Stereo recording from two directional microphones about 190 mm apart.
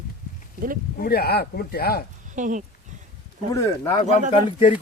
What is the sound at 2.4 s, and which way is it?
Speech, 40° right (ahead or behind).